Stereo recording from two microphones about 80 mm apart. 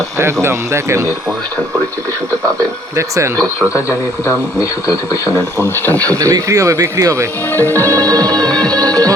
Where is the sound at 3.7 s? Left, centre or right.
Left.